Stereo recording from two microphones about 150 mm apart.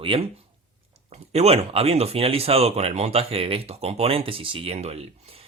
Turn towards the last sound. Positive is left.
turn(degrees=-45)  # may be behind; listen again after turning